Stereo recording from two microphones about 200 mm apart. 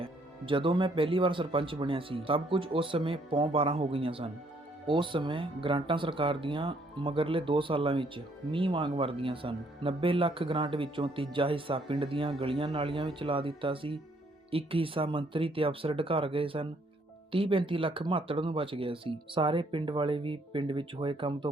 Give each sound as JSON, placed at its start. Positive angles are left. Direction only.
{"t": 0.0, "sound": "speech", "side_deg": -25}